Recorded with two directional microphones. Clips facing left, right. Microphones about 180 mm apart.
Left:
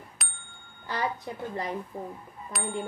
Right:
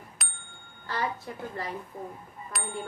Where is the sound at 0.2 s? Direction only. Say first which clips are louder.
Even; centre (ahead or behind).